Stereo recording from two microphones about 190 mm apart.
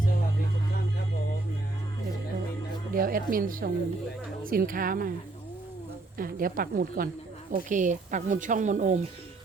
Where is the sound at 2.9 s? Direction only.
50° right (ahead or behind).